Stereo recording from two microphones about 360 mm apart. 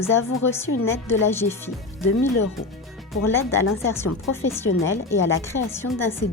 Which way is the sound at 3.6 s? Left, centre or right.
Left.